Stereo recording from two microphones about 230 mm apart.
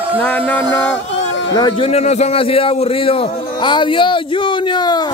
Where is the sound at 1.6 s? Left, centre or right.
Left.